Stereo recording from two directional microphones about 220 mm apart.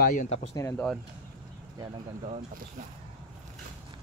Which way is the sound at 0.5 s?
10° left (ahead or behind).